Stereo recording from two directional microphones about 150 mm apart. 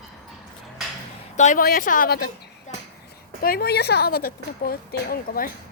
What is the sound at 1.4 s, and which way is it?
Speech, 55° left (ahead or behind).